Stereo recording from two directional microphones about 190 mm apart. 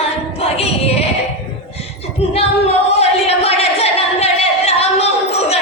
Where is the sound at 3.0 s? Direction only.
35° left (ahead or behind).